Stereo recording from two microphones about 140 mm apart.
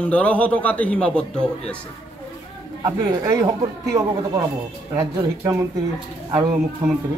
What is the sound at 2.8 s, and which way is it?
Speech, 30° right (ahead or behind).